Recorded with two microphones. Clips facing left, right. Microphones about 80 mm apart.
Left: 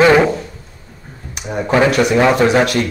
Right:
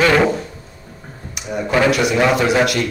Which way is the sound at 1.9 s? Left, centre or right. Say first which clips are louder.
Left 3 dB; left.